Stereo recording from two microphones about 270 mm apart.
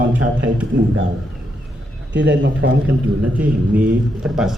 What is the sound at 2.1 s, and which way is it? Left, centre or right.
A man's voice, right.